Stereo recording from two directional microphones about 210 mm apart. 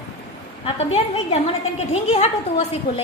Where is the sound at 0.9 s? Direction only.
30° left (ahead or behind).